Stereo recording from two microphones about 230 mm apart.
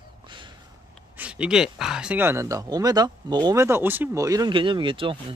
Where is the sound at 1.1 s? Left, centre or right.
Centre.